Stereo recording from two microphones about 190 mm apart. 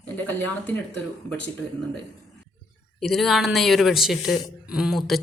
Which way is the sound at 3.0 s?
Centre (ahead or behind).